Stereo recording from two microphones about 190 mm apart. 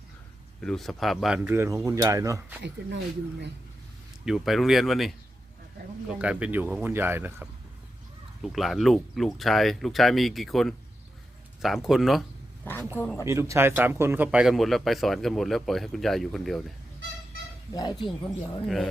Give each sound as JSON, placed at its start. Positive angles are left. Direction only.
{"t": 0.6, "sound": "speech", "side_deg": 0}
{"t": 2.8, "sound": "speech", "side_deg": -60}
{"t": 4.3, "sound": "a man's voice", "side_deg": 0}
{"t": 6.1, "sound": "speech", "side_deg": -5}
{"t": 8.4, "sound": "a man's voice", "side_deg": 0}
{"t": 13.0, "sound": "speech", "side_deg": 10}
{"t": 13.2, "sound": "a man's voice", "side_deg": -15}
{"t": 18.0, "sound": "speech", "side_deg": 25}